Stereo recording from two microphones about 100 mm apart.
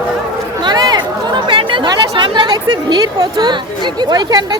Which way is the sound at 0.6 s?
45° right (ahead or behind).